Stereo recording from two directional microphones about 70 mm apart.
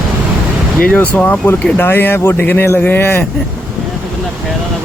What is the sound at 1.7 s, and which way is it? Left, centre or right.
Speech, left.